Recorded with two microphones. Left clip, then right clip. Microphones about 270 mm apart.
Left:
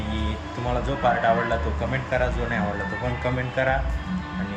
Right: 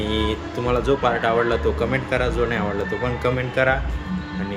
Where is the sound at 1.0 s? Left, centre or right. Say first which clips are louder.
Right 1 dB; centre.